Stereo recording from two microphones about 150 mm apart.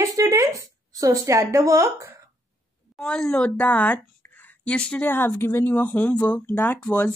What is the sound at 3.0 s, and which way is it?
A woman's voice, 5° left (ahead or behind).